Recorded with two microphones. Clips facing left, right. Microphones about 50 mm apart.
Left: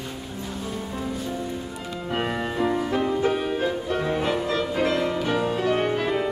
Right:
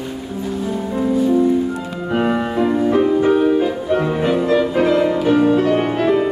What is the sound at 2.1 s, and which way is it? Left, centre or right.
Music, centre.